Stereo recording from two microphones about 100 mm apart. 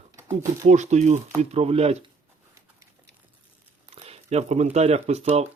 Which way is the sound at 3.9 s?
90° right.